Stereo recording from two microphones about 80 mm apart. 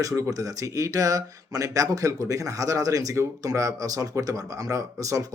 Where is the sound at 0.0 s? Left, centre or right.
Right.